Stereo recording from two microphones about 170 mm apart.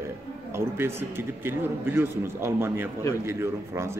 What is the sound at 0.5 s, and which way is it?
A man's voice, 15° right (ahead or behind).